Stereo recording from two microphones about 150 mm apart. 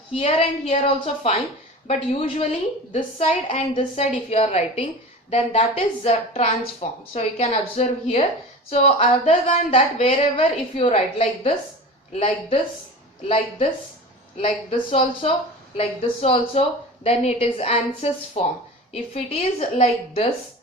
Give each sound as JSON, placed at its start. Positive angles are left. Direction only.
{"t": 0.1, "sound": "a woman's voice", "side_deg": 40}